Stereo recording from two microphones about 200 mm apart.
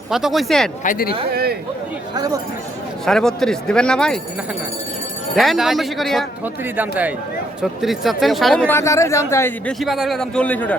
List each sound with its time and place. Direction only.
0.1 s speech: centre (ahead or behind)
0.9 s speech: 45° left (ahead or behind)
1.3 s speech: 50° right (ahead or behind)
2.1 s speech: 20° right (ahead or behind)
3.1 s speech: centre (ahead or behind)
5.4 s speech: centre (ahead or behind)
9.8 s speech: centre (ahead or behind)